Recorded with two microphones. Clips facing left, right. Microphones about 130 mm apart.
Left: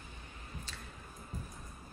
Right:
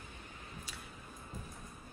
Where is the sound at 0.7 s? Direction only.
10° right (ahead or behind).